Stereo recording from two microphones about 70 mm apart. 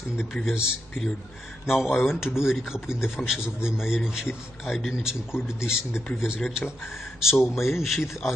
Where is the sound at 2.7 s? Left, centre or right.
Centre.